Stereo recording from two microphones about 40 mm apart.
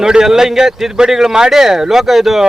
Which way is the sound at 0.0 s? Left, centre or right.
Centre.